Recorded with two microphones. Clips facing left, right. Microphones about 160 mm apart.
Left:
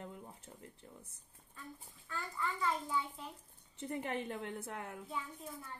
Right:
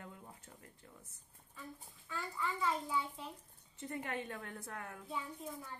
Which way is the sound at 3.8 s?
25° left (ahead or behind).